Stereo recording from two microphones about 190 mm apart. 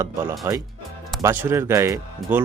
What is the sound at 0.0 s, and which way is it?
Speech, 10° right (ahead or behind).